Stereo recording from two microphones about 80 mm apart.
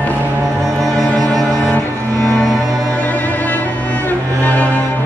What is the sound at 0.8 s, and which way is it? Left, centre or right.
Music, centre.